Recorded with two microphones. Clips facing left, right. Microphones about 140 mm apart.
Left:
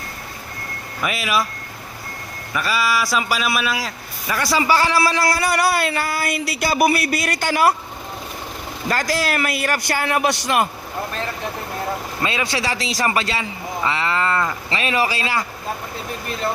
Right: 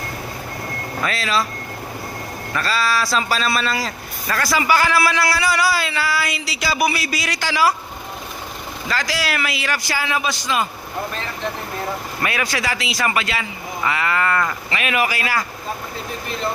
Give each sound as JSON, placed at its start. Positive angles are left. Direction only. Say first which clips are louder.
{"t": 1.0, "sound": "a man's voice", "louder": "left 1 dB", "side_deg": 15}
{"t": 2.5, "sound": "a man's voice", "louder": "even", "side_deg": 10}
{"t": 4.4, "sound": "speech", "louder": "even", "side_deg": 25}
{"t": 5.5, "sound": "speech", "louder": "left 1 dB", "side_deg": 55}
{"t": 8.9, "sound": "speech", "louder": "left 3 dB", "side_deg": 50}
{"t": 12.2, "sound": "speech", "louder": "even", "side_deg": 25}